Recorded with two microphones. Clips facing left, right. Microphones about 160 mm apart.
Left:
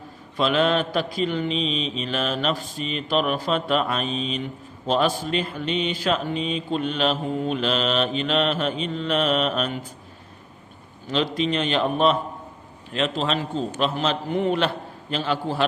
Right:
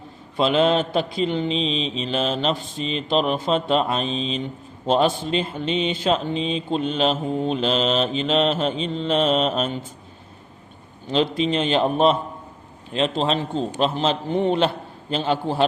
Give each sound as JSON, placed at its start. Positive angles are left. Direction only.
{"t": 0.3, "sound": "speech", "side_deg": -30}
{"t": 11.1, "sound": "speech", "side_deg": -30}